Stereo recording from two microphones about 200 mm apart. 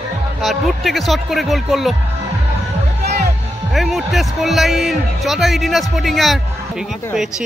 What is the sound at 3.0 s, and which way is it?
Music, 50° right (ahead or behind).